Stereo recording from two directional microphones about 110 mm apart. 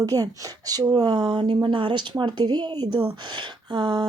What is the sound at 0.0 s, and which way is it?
A woman's voice, 35° right (ahead or behind).